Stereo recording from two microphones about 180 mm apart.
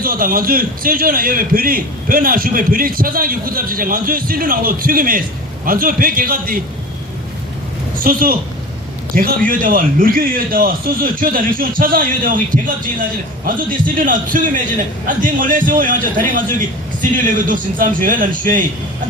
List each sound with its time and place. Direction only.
0.0 s a man's voice: 55° right (ahead or behind)
7.9 s a man's voice: 50° right (ahead or behind)